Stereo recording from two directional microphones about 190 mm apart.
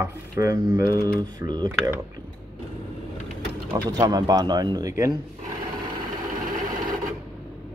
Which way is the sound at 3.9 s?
20° right (ahead or behind).